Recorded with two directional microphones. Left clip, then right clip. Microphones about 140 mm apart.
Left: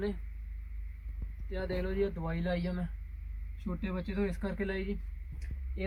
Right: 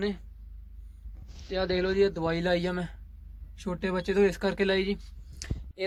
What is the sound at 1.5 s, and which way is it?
A woman's voice, 30° right (ahead or behind).